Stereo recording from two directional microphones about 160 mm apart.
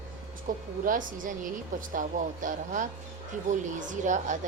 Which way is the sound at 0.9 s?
55° right (ahead or behind).